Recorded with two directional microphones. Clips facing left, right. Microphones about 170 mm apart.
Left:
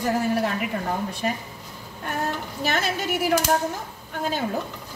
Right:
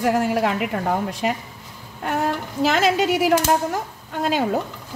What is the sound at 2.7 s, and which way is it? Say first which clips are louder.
Speech: right 7 dB; 90° right.